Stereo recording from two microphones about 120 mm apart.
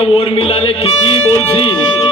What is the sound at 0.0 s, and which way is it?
A man's voice, 55° left (ahead or behind).